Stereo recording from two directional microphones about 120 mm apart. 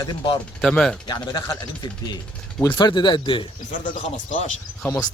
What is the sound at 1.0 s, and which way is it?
Speech, 35° left (ahead or behind).